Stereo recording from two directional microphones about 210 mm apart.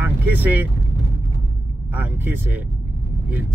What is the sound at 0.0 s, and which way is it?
Vehicle, 10° right (ahead or behind).